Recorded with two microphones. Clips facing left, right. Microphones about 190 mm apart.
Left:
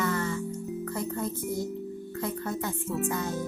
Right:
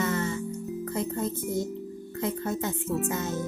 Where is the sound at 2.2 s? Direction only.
20° right (ahead or behind).